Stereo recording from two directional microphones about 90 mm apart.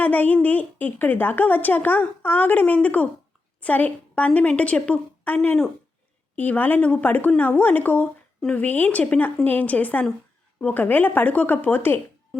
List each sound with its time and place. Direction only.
0.0 s a woman's voice: 20° left (ahead or behind)